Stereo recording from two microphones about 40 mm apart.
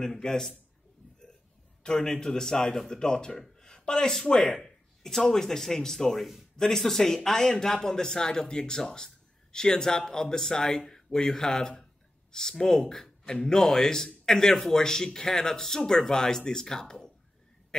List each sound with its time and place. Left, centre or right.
0.0 s a man's voice: centre
1.8 s a man's voice: centre
2.5 s a man's voice: centre
2.9 s a man's voice: centre